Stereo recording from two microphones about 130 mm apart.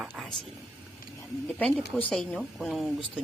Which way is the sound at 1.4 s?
10° left (ahead or behind).